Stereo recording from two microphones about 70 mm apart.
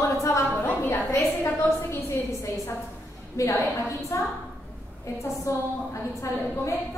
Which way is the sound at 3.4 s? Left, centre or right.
Left.